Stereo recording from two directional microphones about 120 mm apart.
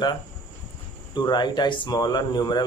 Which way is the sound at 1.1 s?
40° left (ahead or behind).